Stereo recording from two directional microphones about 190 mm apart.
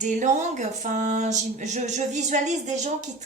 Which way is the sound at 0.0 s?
40° right (ahead or behind).